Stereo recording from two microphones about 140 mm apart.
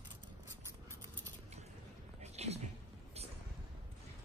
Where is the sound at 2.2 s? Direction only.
50° right (ahead or behind).